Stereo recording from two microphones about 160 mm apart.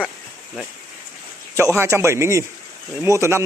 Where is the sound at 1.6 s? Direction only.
15° right (ahead or behind).